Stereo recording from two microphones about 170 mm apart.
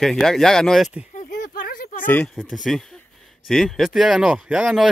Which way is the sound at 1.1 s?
50° left (ahead or behind).